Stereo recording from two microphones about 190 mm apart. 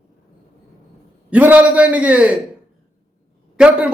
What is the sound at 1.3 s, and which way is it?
A man's voice, 10° right (ahead or behind).